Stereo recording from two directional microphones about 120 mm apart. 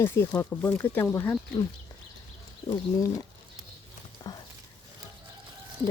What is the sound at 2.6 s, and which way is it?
Speech, 30° left (ahead or behind).